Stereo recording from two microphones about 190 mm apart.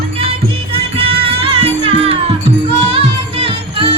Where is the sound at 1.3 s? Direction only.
30° right (ahead or behind).